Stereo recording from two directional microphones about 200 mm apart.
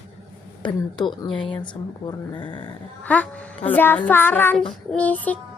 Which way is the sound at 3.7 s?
10° left (ahead or behind).